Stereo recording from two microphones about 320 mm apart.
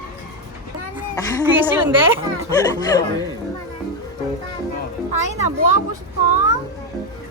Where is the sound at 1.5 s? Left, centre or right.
Centre.